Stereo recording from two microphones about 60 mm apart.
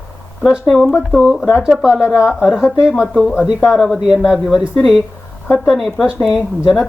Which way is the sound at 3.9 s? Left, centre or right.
Centre.